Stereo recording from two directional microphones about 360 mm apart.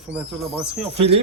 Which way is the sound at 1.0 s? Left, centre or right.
Centre.